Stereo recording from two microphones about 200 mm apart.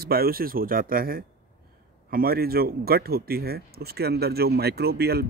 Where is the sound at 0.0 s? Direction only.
50° right (ahead or behind).